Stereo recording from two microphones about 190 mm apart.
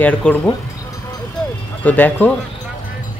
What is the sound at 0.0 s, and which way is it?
Speech, 10° left (ahead or behind).